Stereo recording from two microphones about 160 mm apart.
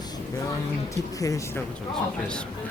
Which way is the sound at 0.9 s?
20° left (ahead or behind).